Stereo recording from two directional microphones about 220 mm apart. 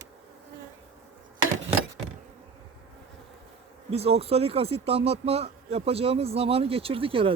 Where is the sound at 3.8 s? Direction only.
25° right (ahead or behind).